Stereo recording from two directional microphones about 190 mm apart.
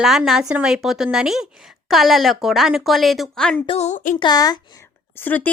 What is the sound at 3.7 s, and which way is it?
Speech, 35° left (ahead or behind).